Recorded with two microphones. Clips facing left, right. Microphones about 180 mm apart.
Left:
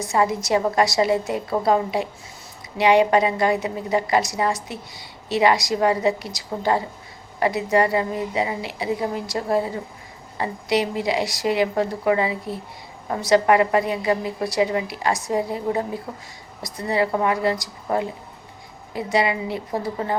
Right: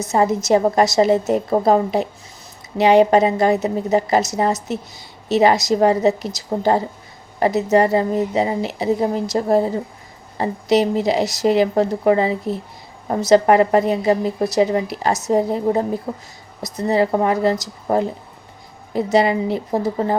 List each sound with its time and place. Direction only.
0.1 s a woman's voice: 40° right (ahead or behind)
4.4 s a woman's voice: 25° right (ahead or behind)
5.4 s a woman's voice: 40° right (ahead or behind)